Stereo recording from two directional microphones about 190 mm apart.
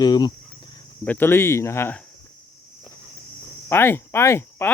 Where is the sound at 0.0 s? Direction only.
20° left (ahead or behind).